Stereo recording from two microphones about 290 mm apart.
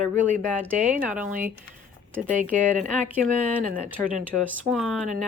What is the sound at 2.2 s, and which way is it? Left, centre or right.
Speech, right.